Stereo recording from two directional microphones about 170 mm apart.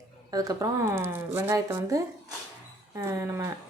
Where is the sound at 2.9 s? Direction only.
15° right (ahead or behind).